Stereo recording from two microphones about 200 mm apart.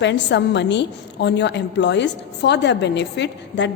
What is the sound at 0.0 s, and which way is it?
A woman's voice, 60° left (ahead or behind).